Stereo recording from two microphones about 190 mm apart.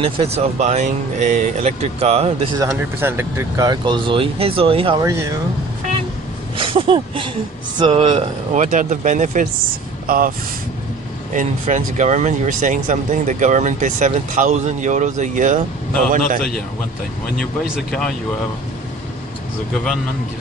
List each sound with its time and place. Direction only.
0.0 s speech: 30° right (ahead or behind)
2.7 s speech: 10° right (ahead or behind); by 5.0 s 30° right (ahead or behind)
5.0 s speech: 15° right (ahead or behind)
6.6 s speech: 30° right (ahead or behind)
8.6 s speech: 40° right (ahead or behind)
11.3 s speech: 40° right (ahead or behind)